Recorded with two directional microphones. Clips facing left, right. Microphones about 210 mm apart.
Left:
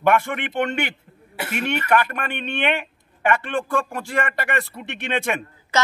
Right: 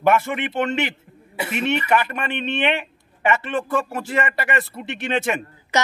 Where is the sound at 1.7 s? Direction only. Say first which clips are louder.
Even; 5° right (ahead or behind).